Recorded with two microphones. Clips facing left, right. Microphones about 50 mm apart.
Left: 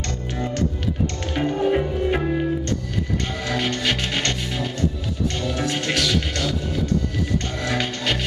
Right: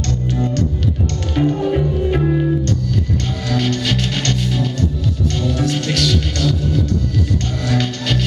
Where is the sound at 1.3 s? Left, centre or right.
Centre.